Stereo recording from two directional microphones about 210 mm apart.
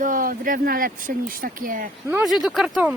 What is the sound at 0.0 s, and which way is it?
Speech, 40° right (ahead or behind).